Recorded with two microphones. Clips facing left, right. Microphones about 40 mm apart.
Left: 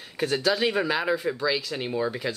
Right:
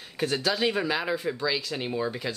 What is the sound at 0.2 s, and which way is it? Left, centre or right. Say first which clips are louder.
Speech: left 2 dB; centre.